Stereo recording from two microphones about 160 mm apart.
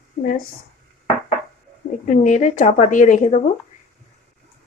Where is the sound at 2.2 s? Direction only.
50° left (ahead or behind).